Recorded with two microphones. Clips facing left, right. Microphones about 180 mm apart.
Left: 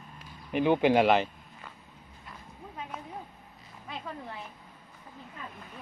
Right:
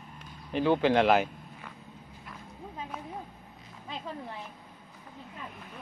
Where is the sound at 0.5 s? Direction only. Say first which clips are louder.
Left 1 dB; 15° left (ahead or behind).